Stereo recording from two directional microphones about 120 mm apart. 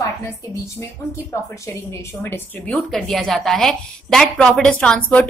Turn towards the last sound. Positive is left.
turn(degrees=10)  # may be behind; listen again after turning